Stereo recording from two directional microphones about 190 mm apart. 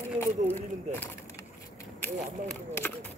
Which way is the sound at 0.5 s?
10° left (ahead or behind).